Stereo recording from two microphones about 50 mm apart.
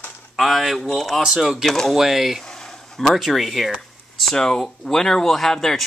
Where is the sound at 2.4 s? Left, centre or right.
Centre.